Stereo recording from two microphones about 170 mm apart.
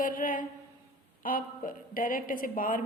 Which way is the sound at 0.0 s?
55° left (ahead or behind).